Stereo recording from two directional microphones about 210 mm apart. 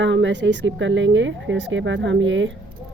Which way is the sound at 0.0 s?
60° right (ahead or behind).